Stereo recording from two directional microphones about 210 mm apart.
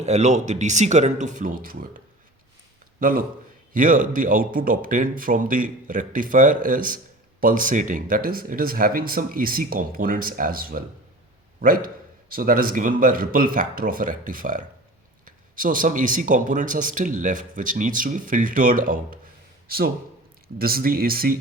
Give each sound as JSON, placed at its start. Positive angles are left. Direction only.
{"t": 0.0, "sound": "speech", "side_deg": -35}
{"t": 3.0, "sound": "a man's voice", "side_deg": -40}